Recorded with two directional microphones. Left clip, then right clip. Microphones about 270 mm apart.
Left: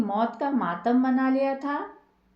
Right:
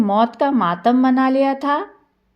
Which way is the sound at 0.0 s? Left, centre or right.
Right.